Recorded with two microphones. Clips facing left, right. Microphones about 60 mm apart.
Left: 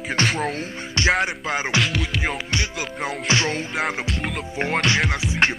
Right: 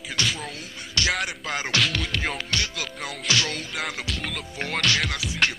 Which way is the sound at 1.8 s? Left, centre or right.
Centre.